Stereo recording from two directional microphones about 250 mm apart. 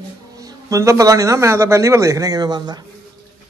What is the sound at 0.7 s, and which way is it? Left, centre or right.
Speech, centre.